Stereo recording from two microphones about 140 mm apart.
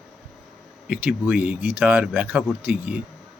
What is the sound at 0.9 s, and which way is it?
Speech, 10° right (ahead or behind).